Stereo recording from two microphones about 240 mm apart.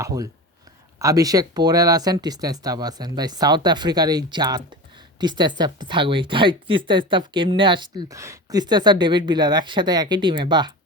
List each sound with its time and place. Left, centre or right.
0.0 s speech: centre